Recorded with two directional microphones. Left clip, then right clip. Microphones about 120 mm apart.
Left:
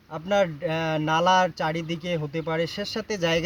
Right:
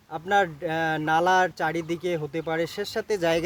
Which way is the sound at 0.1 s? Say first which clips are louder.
Even; 40° right (ahead or behind).